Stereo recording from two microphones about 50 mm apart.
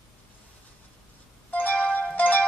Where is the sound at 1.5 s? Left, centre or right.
Left.